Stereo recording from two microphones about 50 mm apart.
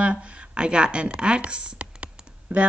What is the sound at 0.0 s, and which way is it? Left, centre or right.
A woman's voice, right.